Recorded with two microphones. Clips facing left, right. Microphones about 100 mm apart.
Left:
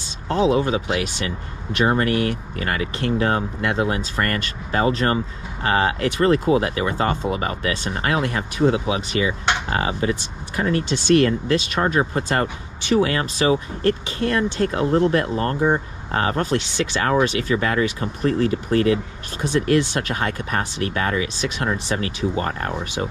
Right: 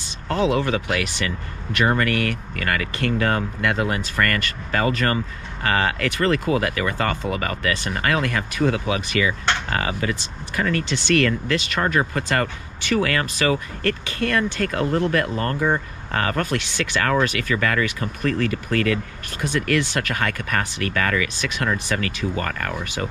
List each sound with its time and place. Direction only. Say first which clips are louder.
0.3 s speech: left 2 dB; 20° left (ahead or behind)